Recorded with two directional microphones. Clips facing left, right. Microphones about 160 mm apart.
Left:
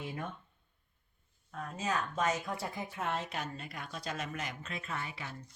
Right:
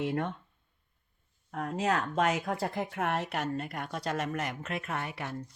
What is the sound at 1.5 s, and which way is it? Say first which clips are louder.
Speech: right 7 dB; 70° right (ahead or behind).